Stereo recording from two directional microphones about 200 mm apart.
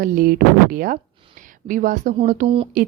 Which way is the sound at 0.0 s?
45° right (ahead or behind).